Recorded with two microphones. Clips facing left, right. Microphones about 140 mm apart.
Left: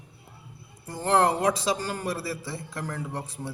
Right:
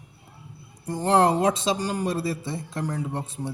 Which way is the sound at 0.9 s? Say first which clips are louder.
Right 3 dB; 20° right (ahead or behind).